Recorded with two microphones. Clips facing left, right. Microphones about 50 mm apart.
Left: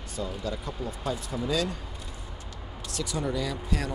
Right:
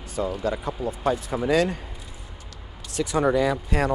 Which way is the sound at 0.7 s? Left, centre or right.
Centre.